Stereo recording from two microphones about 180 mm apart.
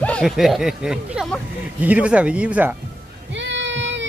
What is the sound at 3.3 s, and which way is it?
Child singing, 90° right.